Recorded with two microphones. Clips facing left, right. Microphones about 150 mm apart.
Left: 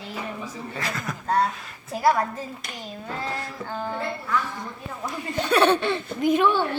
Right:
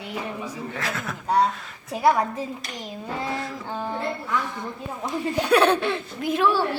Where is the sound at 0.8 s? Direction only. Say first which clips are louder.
Left 1 dB; centre (ahead or behind).